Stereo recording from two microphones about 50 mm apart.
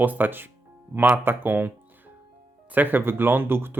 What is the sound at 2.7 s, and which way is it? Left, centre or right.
Speech, right.